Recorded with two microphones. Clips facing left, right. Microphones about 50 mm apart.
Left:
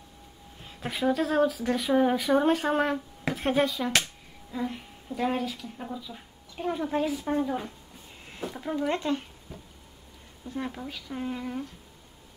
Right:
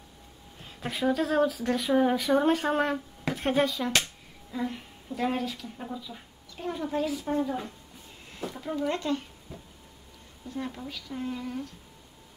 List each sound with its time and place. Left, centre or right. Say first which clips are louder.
0.7 s speech: left 1 dB; centre
6.5 s a child's voice: left 2 dB; centre
10.5 s speech: left 1 dB; left